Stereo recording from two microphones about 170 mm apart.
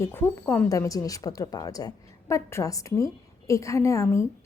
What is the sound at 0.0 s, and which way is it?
Speech, 15° left (ahead or behind).